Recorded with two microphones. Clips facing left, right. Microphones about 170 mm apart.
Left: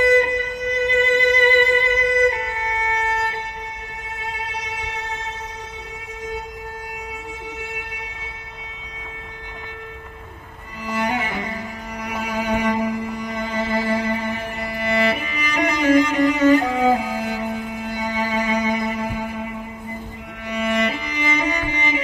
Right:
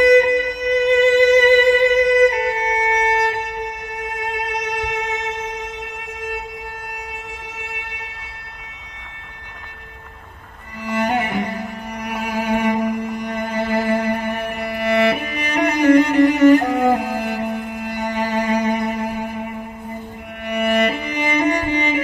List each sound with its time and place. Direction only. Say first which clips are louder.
0.0 s music: right 5 dB; 75° right (ahead or behind)
11.0 s music: right 4 dB; 60° right (ahead or behind)
20.4 s music: right 4 dB; 60° right (ahead or behind)